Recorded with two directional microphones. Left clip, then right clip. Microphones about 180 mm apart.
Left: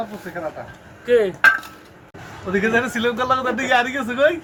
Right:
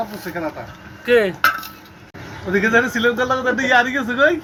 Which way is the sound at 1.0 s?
25° right (ahead or behind).